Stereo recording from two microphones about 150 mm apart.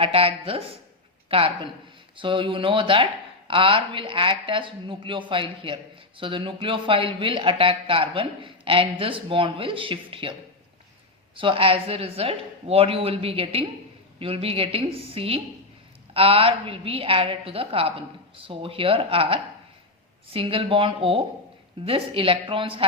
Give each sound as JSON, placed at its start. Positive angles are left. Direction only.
{"t": 0.0, "sound": "speech", "side_deg": -40}
{"t": 11.3, "sound": "speech", "side_deg": -35}